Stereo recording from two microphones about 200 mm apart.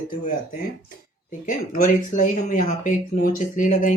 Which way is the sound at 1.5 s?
40° left (ahead or behind).